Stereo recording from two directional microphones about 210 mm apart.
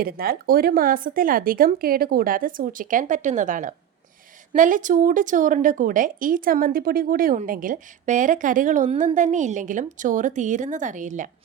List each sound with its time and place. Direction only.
0.0 s a woman's voice: 45° right (ahead or behind)